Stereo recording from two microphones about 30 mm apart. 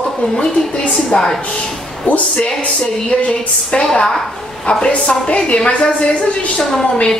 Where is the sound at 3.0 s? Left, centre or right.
Left.